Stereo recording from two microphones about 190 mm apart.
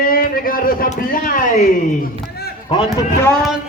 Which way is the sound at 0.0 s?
50° left (ahead or behind).